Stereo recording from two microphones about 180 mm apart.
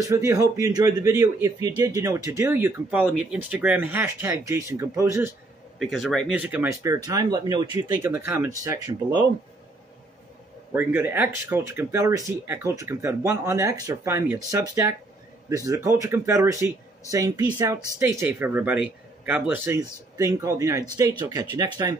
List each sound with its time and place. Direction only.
0.0 s speech: 15° right (ahead or behind)
5.8 s a man's voice: centre (ahead or behind)
6.3 s speech: 10° right (ahead or behind)
10.7 s speech: 10° right (ahead or behind)